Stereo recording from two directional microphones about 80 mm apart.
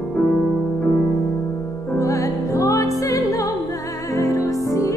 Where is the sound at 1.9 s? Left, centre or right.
Left.